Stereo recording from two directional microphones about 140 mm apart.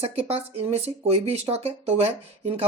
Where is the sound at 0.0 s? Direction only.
45° right (ahead or behind).